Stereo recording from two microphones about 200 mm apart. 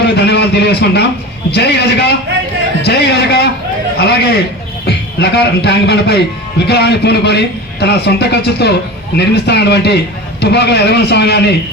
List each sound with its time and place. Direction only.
0.0 s a man's voice: 55° left (ahead or behind)